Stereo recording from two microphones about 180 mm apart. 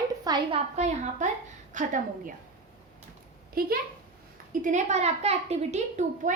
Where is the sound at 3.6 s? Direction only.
55° right (ahead or behind).